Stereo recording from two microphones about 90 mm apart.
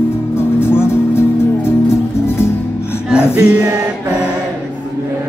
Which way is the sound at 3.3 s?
15° right (ahead or behind).